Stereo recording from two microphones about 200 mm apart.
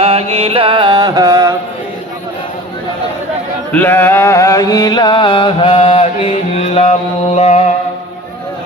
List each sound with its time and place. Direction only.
0.0 s music: 30° right (ahead or behind)
3.7 s a sound: 10° left (ahead or behind); by 6.9 s 30° left (ahead or behind)
7.3 s music: 35° left (ahead or behind)